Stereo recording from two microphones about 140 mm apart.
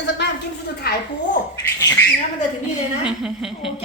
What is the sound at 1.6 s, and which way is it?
Speech, 20° left (ahead or behind).